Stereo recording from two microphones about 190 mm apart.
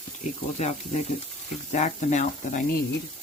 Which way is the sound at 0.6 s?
35° left (ahead or behind).